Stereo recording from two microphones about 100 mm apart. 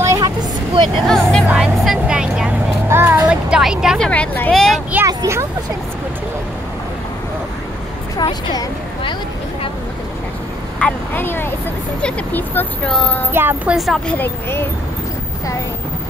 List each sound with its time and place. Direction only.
0.0 s vehicle: 30° right (ahead or behind)
1.0 s speech: 5° left (ahead or behind)
1.5 s vehicle: 5° right (ahead or behind)
2.9 s a sound: 20° right (ahead or behind)
4.0 s speech: 10° left (ahead or behind)
4.5 s a sound: 5° left (ahead or behind)
5.0 s speech: 30° right (ahead or behind)
8.2 s speech: 45° left (ahead or behind)
10.8 s a woman's voice: 15° left (ahead or behind)
13.3 s speech: 20° right (ahead or behind)
13.7 s speech: centre (ahead or behind)
14.0 s a woman's voice: 20° left (ahead or behind)